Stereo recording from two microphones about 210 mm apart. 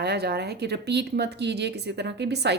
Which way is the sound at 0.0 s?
50° right (ahead or behind).